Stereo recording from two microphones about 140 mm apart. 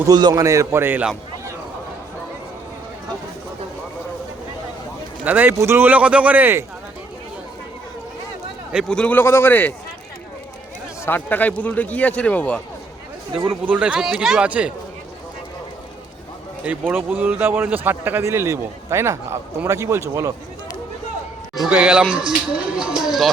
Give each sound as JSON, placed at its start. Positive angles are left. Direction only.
{"t": 0.1, "sound": "a man's voice", "side_deg": -30}
{"t": 5.2, "sound": "speech", "side_deg": -10}
{"t": 8.7, "sound": "a man's voice", "side_deg": 5}
{"t": 11.0, "sound": "a man's voice", "side_deg": 15}
{"t": 13.5, "sound": "speech", "side_deg": -10}
{"t": 16.6, "sound": "a man's voice", "side_deg": -15}
{"t": 21.5, "sound": "speech", "side_deg": -5}